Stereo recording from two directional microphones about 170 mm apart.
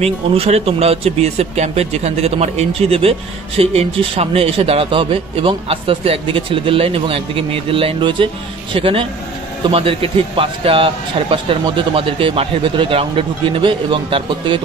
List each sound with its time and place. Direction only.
0.0 s speech: 35° right (ahead or behind)